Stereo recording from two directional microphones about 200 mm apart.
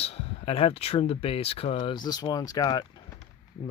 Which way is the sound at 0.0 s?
30° left (ahead or behind).